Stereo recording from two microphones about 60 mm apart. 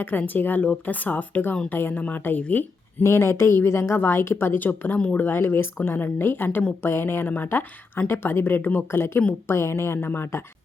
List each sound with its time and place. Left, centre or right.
0.0 s a woman's voice: left
3.0 s a woman's voice: left
5.4 s a woman's voice: left